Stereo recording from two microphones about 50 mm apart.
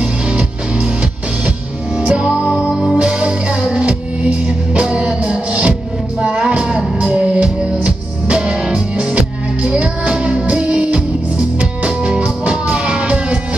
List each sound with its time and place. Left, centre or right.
0.0 s music: right
2.0 s music: right